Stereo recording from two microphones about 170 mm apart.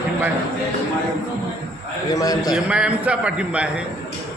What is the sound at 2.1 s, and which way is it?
Speech, 20° left (ahead or behind).